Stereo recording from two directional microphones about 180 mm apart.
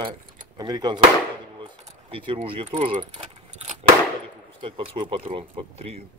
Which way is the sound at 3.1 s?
35° right (ahead or behind).